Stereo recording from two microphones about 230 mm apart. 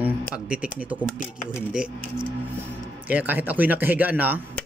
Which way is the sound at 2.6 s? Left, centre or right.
Centre.